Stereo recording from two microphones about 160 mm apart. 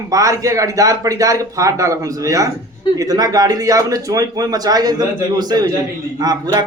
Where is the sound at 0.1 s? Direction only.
20° right (ahead or behind).